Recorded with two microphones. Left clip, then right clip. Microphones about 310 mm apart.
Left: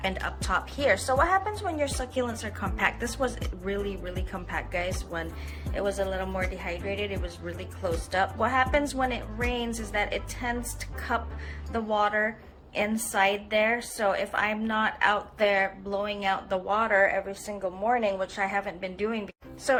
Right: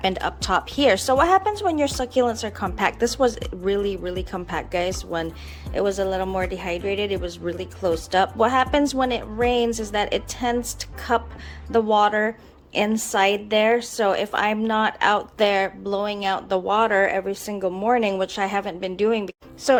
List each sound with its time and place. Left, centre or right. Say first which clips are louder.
0.0 s a woman's voice: right 7 dB; right